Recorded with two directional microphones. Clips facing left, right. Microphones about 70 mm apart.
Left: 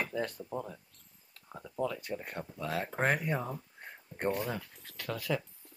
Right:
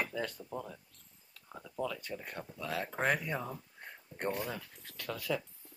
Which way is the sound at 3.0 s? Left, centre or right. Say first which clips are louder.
Left 2 dB; left.